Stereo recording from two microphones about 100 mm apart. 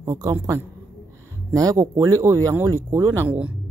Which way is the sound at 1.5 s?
35° right (ahead or behind).